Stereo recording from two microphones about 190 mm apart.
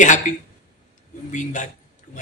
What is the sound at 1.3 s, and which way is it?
Speech, 40° left (ahead or behind).